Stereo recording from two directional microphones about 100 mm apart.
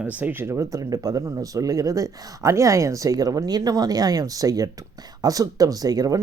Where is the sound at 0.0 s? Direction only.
15° right (ahead or behind).